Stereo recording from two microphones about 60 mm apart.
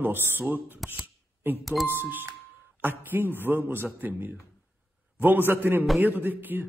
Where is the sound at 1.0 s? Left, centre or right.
Right.